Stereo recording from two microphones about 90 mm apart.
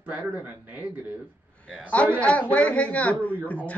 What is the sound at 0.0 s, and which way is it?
Speech, 15° right (ahead or behind).